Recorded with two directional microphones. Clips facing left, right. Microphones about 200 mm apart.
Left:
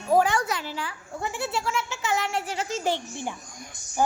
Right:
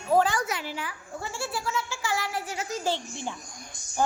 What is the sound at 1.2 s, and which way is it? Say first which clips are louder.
A child's voice: left 4 dB; 20° left (ahead or behind).